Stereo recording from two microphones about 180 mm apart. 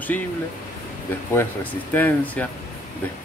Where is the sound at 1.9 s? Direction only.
10° left (ahead or behind).